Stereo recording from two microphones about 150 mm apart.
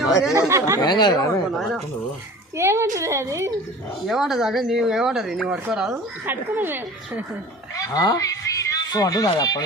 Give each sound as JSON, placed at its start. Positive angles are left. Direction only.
{"t": 0.3, "sound": "a woman's voice", "side_deg": -20}
{"t": 0.8, "sound": "speech", "side_deg": 25}
{"t": 1.5, "sound": "speech", "side_deg": 0}
{"t": 2.6, "sound": "a woman's voice", "side_deg": -15}
{"t": 4.0, "sound": "speech", "side_deg": 0}
{"t": 7.8, "sound": "speech", "side_deg": 25}